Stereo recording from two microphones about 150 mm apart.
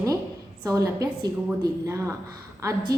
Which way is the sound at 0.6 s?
25° right (ahead or behind).